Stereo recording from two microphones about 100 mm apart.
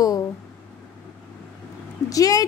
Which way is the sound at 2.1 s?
40° left (ahead or behind).